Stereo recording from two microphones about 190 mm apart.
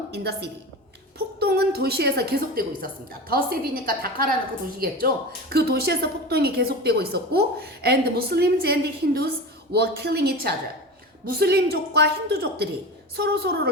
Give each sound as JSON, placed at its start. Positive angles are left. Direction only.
{"t": 0.1, "sound": "a woman's voice", "side_deg": -60}